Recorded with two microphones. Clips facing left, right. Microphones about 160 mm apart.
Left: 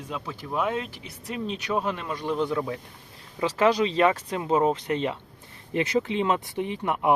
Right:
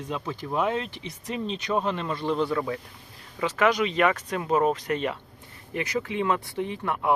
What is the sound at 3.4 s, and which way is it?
Speech, 30° left (ahead or behind).